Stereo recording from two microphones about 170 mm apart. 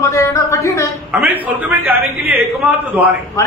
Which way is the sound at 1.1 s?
10° right (ahead or behind).